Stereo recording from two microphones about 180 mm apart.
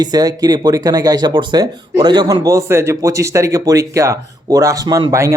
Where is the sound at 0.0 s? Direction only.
20° right (ahead or behind).